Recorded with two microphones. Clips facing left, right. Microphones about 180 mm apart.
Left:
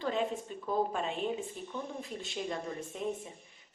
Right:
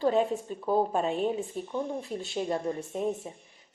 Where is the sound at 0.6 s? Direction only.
35° right (ahead or behind).